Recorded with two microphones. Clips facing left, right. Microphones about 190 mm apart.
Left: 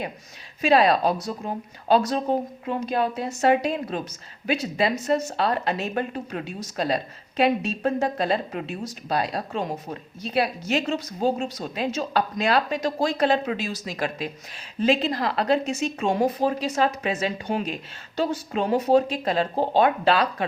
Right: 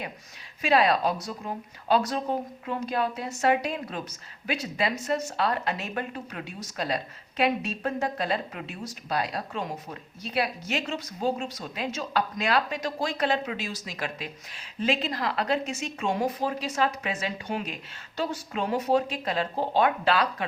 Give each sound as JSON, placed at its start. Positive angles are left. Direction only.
{"t": 0.6, "sound": "speech", "side_deg": 35}